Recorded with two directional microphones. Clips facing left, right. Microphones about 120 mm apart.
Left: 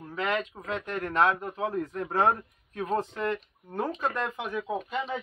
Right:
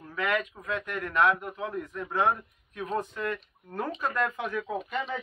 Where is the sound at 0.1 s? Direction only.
30° left (ahead or behind).